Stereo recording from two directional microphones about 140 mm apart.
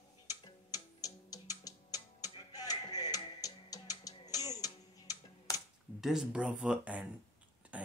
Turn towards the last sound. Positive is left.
turn(degrees=-10)  # may be behind; listen again after turning